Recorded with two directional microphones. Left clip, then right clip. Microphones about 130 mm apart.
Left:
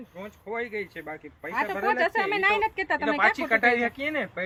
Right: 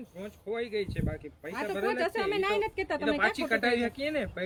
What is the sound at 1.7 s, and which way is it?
A woman's voice, 25° right (ahead or behind).